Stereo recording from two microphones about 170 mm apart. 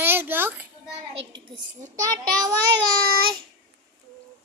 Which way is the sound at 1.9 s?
20° right (ahead or behind).